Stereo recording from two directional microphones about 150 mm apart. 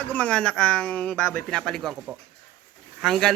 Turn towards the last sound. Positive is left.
turn(degrees=0)  # may be behind; listen again after turning